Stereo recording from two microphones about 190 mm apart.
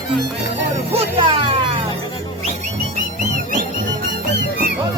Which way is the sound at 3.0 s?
45° right (ahead or behind).